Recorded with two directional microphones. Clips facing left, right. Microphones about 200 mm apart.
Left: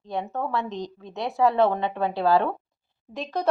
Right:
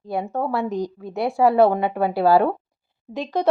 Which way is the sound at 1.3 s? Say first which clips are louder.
Right 3 dB; 30° right (ahead or behind).